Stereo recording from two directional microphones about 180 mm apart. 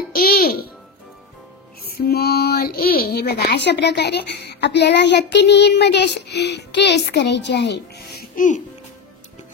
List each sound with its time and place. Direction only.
0.1 s a child's voice: 55° left (ahead or behind)
1.9 s speech: 60° left (ahead or behind)